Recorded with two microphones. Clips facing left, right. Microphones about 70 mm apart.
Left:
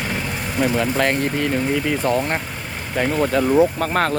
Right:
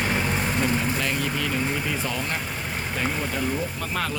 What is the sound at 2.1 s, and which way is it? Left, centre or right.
Speech, left.